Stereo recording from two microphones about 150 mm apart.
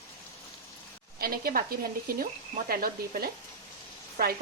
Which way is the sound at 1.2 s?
80° right.